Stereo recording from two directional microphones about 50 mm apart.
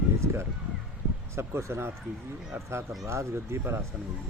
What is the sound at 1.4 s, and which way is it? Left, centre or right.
Speech, right.